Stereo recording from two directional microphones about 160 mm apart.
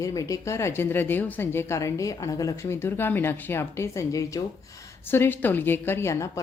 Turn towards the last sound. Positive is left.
turn(degrees=15)  # may be behind; listen again after turning